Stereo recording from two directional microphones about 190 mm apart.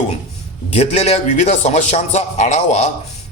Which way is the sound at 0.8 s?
35° left (ahead or behind).